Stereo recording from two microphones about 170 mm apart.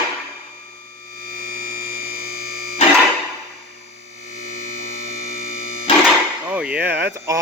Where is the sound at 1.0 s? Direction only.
60° right (ahead or behind).